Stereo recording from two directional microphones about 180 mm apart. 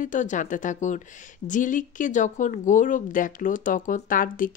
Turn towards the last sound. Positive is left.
turn(degrees=50)  # may be behind; listen again after turning